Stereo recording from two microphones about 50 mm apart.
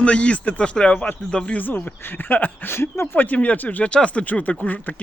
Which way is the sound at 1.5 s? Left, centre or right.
Left.